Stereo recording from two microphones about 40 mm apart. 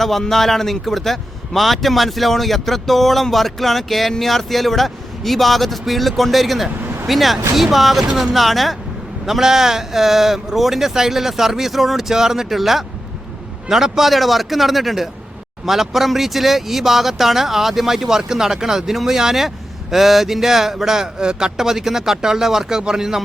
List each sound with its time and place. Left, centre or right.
0.0 s speech: centre
6.8 s vehicle: right
7.1 s speech: centre